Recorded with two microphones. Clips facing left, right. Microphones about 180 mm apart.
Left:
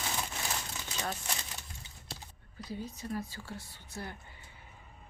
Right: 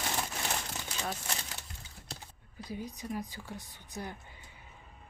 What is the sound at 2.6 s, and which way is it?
A woman's voice, 15° right (ahead or behind).